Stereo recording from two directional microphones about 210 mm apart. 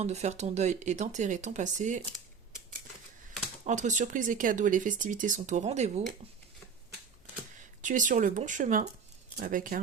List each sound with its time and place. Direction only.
0.0 s speech: 30° right (ahead or behind)
3.6 s speech: 35° right (ahead or behind)
7.8 s speech: 40° right (ahead or behind)